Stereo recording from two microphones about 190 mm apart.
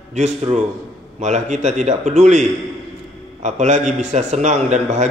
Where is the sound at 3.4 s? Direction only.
40° right (ahead or behind).